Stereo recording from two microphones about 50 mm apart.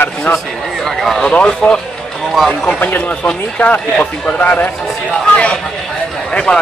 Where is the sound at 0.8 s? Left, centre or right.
Centre.